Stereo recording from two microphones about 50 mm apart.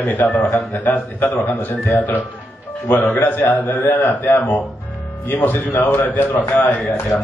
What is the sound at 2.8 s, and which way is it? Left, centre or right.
A man's voice, left.